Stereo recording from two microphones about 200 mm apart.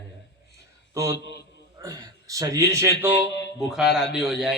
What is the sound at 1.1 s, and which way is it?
Speech, 60° left (ahead or behind).